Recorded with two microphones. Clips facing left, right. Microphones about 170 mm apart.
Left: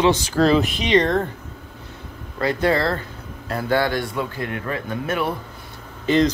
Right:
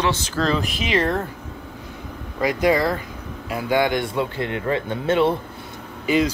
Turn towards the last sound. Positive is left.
turn(degrees=-10)  # may be behind; listen again after turning